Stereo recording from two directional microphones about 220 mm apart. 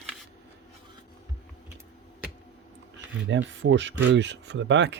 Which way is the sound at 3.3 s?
55° right (ahead or behind).